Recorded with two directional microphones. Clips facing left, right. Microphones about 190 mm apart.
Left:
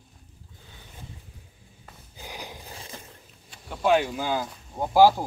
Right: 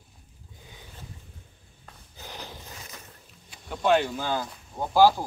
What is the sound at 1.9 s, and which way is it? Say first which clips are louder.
Snort: left 2 dB; 10° left (ahead or behind).